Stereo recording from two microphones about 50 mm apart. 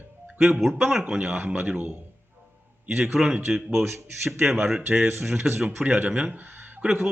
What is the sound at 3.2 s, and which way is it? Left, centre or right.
A man's voice, centre.